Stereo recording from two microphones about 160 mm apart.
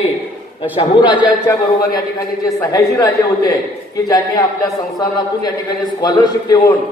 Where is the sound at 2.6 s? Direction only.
20° left (ahead or behind).